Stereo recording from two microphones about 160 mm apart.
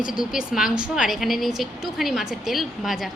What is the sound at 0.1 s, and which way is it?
A woman's voice, 5° right (ahead or behind).